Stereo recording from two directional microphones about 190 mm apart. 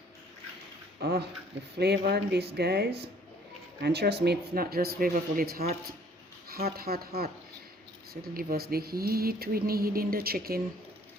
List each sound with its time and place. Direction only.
1.0 s speech: 55° right (ahead or behind)